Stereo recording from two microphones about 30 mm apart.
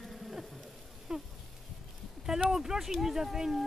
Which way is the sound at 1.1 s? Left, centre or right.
Centre.